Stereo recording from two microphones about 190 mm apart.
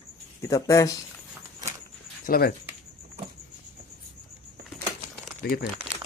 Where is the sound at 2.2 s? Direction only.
50° left (ahead or behind).